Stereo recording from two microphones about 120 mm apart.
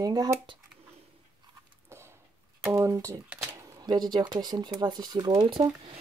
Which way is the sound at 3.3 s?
10° right (ahead or behind).